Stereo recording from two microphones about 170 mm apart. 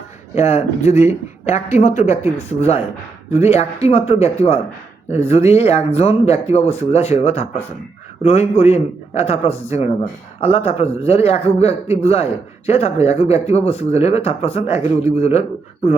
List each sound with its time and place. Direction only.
0.3 s speech: 40° left (ahead or behind)